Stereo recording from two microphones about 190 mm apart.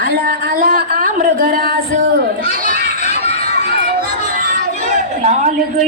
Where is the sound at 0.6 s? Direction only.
50° right (ahead or behind).